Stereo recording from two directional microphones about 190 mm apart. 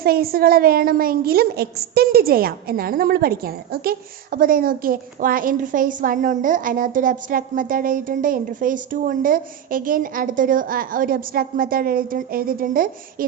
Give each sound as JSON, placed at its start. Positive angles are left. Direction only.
{"t": 0.0, "sound": "a woman's voice", "side_deg": -55}